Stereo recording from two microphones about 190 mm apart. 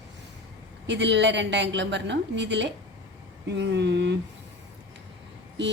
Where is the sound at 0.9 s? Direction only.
70° right (ahead or behind).